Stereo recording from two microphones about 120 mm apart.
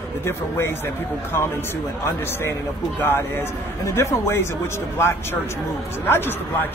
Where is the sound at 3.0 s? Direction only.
20° left (ahead or behind).